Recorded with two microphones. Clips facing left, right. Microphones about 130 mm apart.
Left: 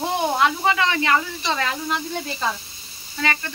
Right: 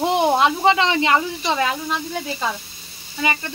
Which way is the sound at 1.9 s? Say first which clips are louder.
Right 1 dB; 5° right (ahead or behind).